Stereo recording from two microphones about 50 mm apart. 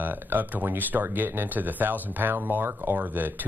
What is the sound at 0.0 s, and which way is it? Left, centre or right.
Speech, right.